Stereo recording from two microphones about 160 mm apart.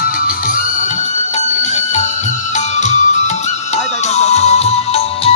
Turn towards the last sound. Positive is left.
turn(degrees=35)  # may be behind; listen again after turning